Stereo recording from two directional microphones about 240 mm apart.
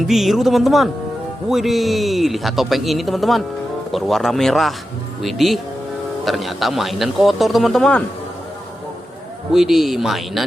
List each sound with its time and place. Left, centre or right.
0.0 s a man's voice: centre
9.5 s a man's voice: centre